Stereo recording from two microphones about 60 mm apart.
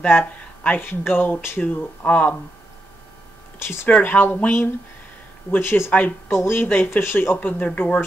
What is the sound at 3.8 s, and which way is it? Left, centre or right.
Speech, left.